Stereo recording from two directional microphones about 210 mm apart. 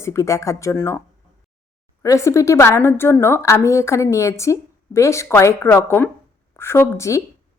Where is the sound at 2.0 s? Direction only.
15° left (ahead or behind).